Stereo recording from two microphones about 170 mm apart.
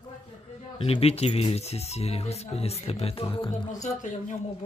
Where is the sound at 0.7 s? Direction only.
35° left (ahead or behind).